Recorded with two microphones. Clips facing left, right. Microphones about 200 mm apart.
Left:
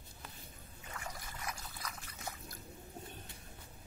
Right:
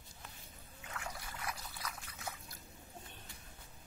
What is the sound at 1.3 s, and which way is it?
Trickle, 10° right (ahead or behind).